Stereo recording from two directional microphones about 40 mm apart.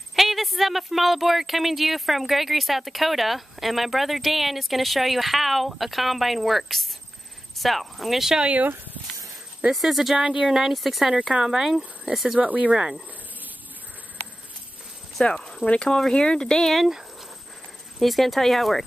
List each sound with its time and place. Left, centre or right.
0.1 s speech: centre
9.8 s speech: centre
10.1 s speech: centre
12.4 s speech: right
15.3 s a sound: centre
15.6 s speech: left
16.6 s speech: centre
17.9 s speech: centre